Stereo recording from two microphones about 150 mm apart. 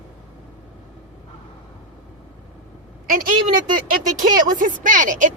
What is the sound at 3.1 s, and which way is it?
Speech, 65° right (ahead or behind).